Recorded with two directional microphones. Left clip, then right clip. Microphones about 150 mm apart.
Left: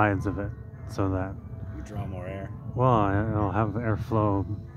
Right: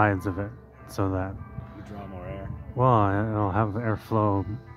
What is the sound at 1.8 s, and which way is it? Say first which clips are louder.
Music: left 2 dB; 90° left.